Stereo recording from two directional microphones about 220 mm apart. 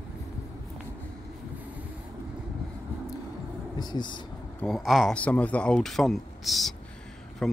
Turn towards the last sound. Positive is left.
turn(degrees=0)  # may be behind; listen again after turning